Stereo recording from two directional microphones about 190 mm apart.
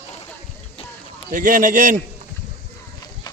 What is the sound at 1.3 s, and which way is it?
Speech, 45° right (ahead or behind).